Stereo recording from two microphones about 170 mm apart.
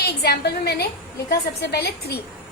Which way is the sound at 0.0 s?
70° left (ahead or behind).